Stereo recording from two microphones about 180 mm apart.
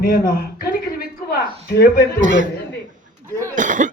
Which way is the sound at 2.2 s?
45° right (ahead or behind).